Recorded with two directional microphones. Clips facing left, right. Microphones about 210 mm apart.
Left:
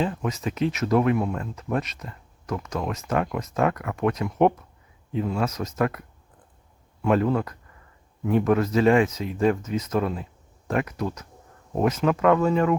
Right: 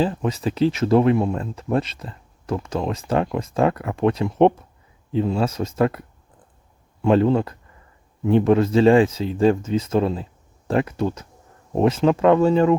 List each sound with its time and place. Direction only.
0.0 s speech: 30° right (ahead or behind)